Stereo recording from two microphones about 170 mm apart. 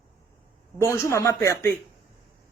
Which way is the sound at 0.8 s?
15° left (ahead or behind).